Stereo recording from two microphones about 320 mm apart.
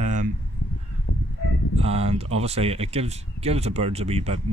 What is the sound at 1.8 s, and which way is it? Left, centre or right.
Speech, centre.